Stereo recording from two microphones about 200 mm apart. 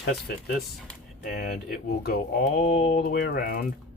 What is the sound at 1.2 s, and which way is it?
Speech, 50° left (ahead or behind).